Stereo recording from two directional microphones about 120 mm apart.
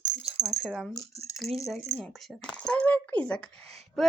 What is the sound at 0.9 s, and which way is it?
Speech, 30° left (ahead or behind).